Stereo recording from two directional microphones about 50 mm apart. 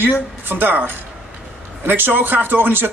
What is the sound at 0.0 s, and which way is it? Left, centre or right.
A man's voice, right.